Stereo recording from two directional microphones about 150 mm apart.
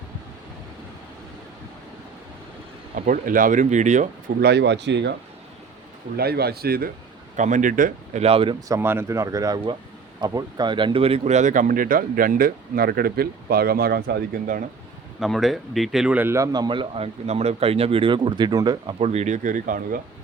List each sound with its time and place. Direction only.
2.9 s speech: 65° right (ahead or behind)
4.4 s speech: 90° right
6.1 s speech: 90° right
7.3 s speech: 55° right (ahead or behind)
8.2 s speech: 40° right (ahead or behind)
8.6 s speech: 20° right (ahead or behind); by 14.6 s 75° right (ahead or behind)
15.2 s speech: centre (ahead or behind); by 18.9 s 30° right (ahead or behind)
18.9 s speech: 45° right (ahead or behind); by 20.0 s 65° right (ahead or behind)